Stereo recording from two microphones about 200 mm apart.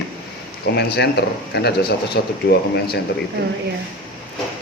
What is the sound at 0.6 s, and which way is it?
Speech, 55° left (ahead or behind).